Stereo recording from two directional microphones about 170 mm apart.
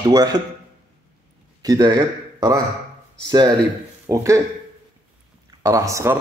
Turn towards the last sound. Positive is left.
turn(degrees=-20)  # may be behind; listen again after turning